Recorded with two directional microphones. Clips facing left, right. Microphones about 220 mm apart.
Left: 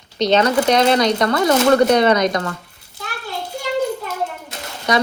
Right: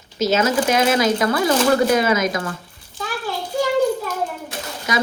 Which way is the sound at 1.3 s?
25° left (ahead or behind).